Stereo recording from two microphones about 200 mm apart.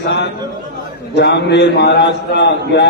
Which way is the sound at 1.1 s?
60° left (ahead or behind).